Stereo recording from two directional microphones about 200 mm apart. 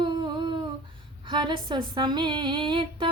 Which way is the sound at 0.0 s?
25° right (ahead or behind).